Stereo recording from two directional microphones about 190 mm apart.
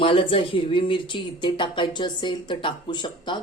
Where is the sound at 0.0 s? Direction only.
25° left (ahead or behind).